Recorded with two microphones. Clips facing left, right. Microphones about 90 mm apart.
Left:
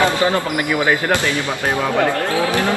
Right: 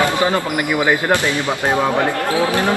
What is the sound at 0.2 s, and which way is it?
Speech, 20° right (ahead or behind).